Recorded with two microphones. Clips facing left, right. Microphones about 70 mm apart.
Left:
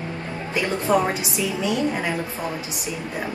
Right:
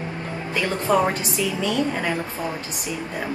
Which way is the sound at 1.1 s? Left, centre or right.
Centre.